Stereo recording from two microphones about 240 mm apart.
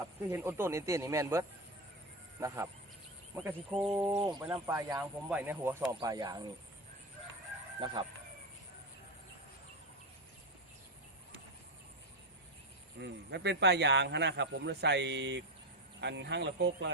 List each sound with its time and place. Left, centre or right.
0.3 s speech: centre
3.3 s fowl: centre
4.2 s speech: centre
13.0 s speech: right